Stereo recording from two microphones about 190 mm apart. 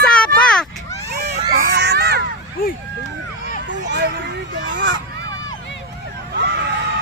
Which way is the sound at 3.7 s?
65° right (ahead or behind).